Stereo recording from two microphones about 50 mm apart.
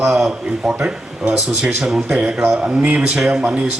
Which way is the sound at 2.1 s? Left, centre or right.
Centre.